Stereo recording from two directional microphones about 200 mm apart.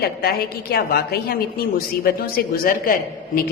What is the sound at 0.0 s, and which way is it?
A woman's voice, 50° left (ahead or behind).